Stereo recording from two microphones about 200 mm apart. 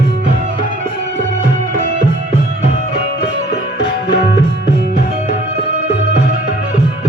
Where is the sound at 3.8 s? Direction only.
55° left (ahead or behind).